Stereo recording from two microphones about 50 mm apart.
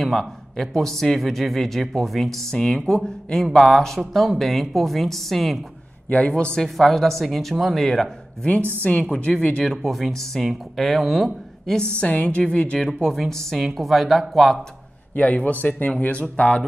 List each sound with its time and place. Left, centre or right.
0.0 s speech: centre
6.0 s a man's voice: left
6.3 s speech: centre
6.6 s speech: centre
9.1 s speech: left
9.8 s speech: centre
11.7 s speech: centre
12.7 s speech: centre
15.1 s a man's voice: left